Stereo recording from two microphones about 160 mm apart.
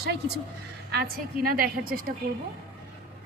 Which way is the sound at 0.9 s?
75° right (ahead or behind).